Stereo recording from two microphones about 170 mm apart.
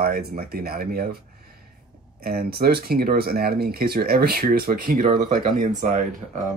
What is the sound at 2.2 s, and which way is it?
Speech, 65° right (ahead or behind).